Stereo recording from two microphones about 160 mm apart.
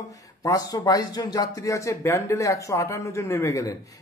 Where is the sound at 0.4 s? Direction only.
20° left (ahead or behind).